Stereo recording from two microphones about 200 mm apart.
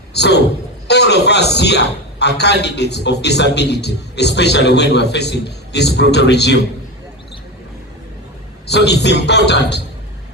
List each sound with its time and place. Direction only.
0.1 s a man's voice: 55° left (ahead or behind)
8.6 s a man's voice: 55° left (ahead or behind)